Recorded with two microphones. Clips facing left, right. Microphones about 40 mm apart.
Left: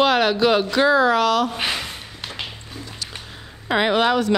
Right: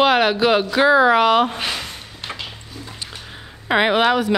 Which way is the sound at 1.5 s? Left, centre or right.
Centre.